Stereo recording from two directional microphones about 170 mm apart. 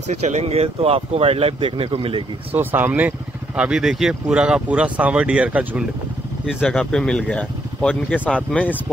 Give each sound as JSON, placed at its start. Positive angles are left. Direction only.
{"t": 0.4, "sound": "speech", "side_deg": -40}
{"t": 2.5, "sound": "speech", "side_deg": -10}
{"t": 6.4, "sound": "speech", "side_deg": 5}